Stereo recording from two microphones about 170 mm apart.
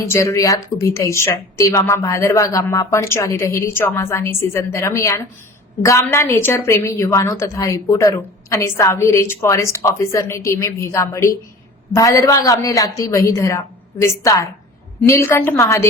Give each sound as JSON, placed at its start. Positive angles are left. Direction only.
{"t": 0.1, "sound": "a woman's voice", "side_deg": 15}